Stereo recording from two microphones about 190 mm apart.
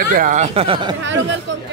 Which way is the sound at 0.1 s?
45° right (ahead or behind).